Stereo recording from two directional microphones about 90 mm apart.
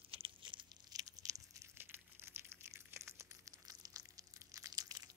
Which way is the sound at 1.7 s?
25° right (ahead or behind).